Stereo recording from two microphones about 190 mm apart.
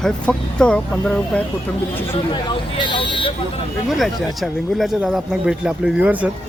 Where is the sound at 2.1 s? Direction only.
25° left (ahead or behind).